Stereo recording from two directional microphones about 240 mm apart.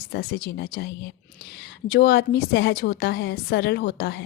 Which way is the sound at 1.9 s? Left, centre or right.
Left.